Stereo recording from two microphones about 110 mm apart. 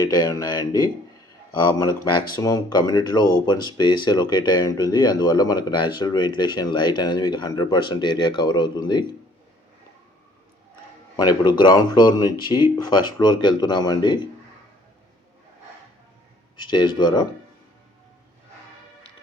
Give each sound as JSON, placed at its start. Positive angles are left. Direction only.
{"t": 0.1, "sound": "speech", "side_deg": 35}
{"t": 11.2, "sound": "speech", "side_deg": 40}
{"t": 16.6, "sound": "speech", "side_deg": 45}